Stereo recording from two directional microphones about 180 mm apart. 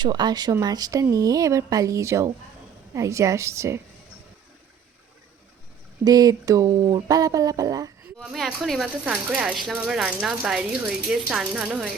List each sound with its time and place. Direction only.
0.0 s a woman's voice: 25° right (ahead or behind)
6.1 s speech: 20° right (ahead or behind)
8.2 s speech: centre (ahead or behind)